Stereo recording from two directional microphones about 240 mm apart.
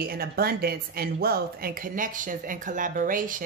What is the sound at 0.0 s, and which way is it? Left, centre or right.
Speech, right.